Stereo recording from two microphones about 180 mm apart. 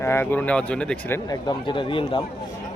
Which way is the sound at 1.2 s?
25° left (ahead or behind).